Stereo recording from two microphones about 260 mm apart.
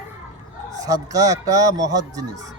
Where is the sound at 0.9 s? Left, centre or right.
Centre.